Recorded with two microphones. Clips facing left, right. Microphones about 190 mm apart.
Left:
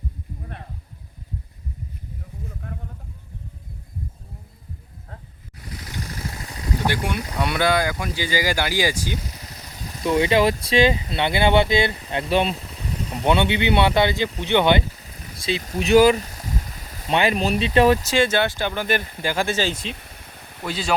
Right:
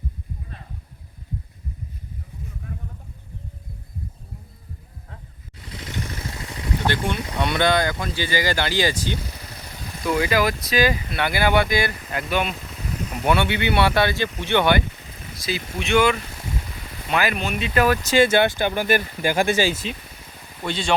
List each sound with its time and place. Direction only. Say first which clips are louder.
2.6 s a sound: even; 60° left (ahead or behind)
5.5 s vehicle: right 2 dB; 25° right (ahead or behind)
6.8 s speech: right 1 dB; 10° left (ahead or behind)
9.9 s speech: left 3 dB; 30° left (ahead or behind)
15.0 s boat: right 1 dB; 40° left (ahead or behind)
15.6 s vehicle: left 5 dB; 40° left (ahead or behind)
17.1 s speech: left 3 dB; 30° left (ahead or behind)
18.0 s speech: right 3 dB; centre (ahead or behind)
18.3 s speech: right 3 dB; 15° right (ahead or behind); by 20.9 s 5° left (ahead or behind)